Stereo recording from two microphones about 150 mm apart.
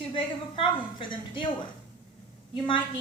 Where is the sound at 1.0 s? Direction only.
30° left (ahead or behind).